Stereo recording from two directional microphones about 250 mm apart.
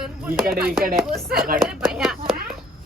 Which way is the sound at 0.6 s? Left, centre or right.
Right.